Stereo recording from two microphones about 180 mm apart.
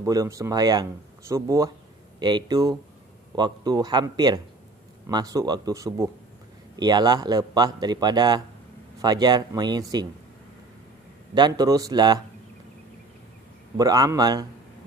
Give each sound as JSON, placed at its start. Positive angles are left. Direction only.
{"t": 0.0, "sound": "a man's voice", "side_deg": -20}
{"t": 11.3, "sound": "a man's voice", "side_deg": -25}
{"t": 13.7, "sound": "a man's voice", "side_deg": -20}